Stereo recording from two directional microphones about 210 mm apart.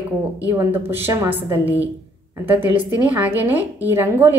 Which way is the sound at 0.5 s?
10° right (ahead or behind).